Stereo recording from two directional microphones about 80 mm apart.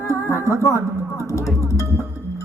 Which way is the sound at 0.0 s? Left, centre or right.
Left.